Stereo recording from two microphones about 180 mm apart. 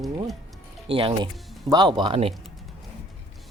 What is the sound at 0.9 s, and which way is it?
Speech, 30° right (ahead or behind).